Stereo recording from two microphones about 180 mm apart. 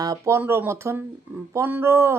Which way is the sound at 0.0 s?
20° right (ahead or behind).